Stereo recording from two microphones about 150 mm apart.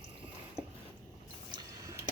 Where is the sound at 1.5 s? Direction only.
25° right (ahead or behind).